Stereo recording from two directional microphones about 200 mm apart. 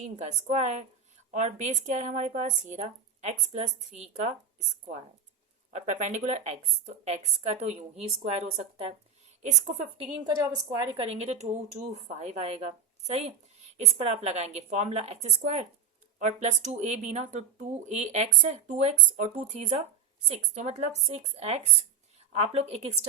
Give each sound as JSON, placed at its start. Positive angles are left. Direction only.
{"t": 0.0, "sound": "speech", "side_deg": -35}
{"t": 5.7, "sound": "speech", "side_deg": -40}
{"t": 10.2, "sound": "speech", "side_deg": -20}